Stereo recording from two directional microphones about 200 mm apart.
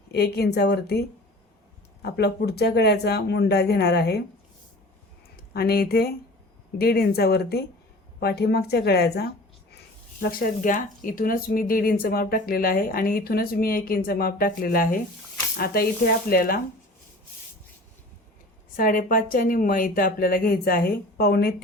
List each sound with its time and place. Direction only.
0.1 s speech: 55° left (ahead or behind)
5.5 s speech: 50° left (ahead or behind)
18.8 s speech: 45° left (ahead or behind)